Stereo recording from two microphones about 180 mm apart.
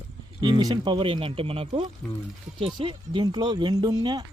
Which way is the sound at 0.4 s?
25° right (ahead or behind).